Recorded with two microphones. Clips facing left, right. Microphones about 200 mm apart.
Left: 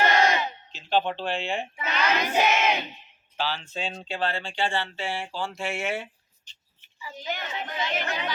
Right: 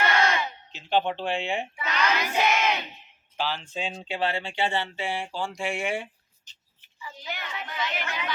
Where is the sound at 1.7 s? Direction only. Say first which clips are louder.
Left 2 dB; 35° left (ahead or behind).